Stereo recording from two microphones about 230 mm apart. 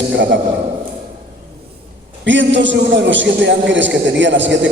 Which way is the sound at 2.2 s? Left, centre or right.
Right.